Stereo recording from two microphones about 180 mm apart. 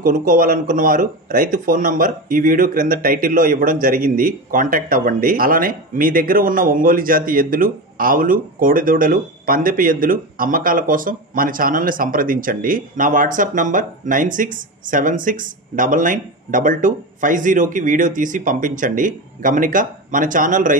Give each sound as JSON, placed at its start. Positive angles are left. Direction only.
{"t": 0.0, "sound": "speech", "side_deg": -45}